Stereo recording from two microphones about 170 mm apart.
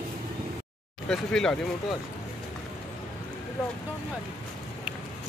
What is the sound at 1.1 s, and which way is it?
Speech, 5° left (ahead or behind).